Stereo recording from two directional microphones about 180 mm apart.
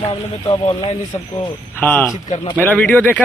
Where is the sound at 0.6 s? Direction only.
35° left (ahead or behind).